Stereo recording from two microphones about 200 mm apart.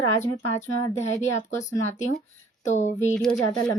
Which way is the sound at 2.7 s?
35° left (ahead or behind).